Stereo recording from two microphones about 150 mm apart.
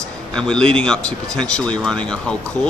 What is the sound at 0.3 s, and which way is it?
Speech, 5° left (ahead or behind).